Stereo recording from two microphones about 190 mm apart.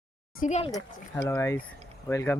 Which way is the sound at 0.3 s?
40° left (ahead or behind).